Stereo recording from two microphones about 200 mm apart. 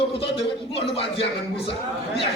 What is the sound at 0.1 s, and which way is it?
Speech, 30° left (ahead or behind).